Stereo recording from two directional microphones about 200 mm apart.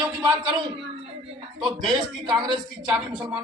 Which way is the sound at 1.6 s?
20° right (ahead or behind).